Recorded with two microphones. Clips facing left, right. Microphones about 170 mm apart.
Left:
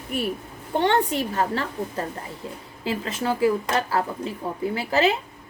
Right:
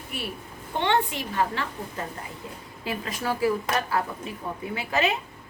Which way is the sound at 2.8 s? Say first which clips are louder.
Left 4 dB; 25° left (ahead or behind).